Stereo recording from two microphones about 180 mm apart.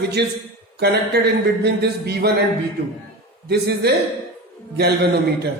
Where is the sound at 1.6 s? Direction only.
65° right (ahead or behind).